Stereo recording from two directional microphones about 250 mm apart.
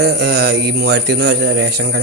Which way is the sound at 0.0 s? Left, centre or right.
Right.